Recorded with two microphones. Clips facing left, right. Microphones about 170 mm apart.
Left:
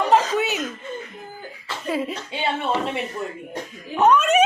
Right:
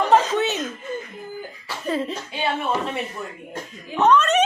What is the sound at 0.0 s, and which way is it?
Chuckle, 10° left (ahead or behind).